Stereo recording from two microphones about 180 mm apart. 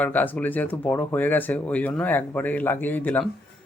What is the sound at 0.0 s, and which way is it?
Speech, 10° left (ahead or behind).